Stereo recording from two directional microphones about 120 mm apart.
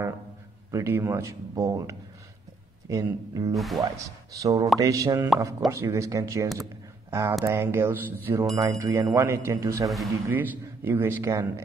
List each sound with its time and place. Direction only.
0.7 s a man's voice: 25° right (ahead or behind)
3.5 s speech: centre (ahead or behind)
4.4 s a man's voice: 30° right (ahead or behind)